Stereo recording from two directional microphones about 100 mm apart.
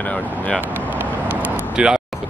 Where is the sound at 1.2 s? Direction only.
15° right (ahead or behind).